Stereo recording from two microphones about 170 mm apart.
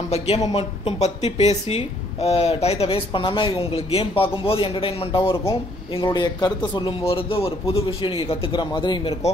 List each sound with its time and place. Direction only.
0.4 s speech: 30° left (ahead or behind)